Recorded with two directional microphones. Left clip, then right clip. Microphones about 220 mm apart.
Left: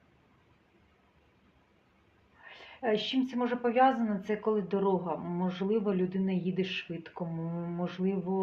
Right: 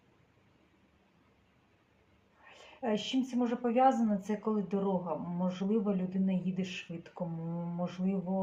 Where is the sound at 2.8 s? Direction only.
35° left (ahead or behind).